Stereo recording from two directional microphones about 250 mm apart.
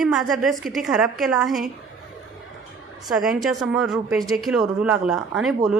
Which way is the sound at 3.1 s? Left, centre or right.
Centre.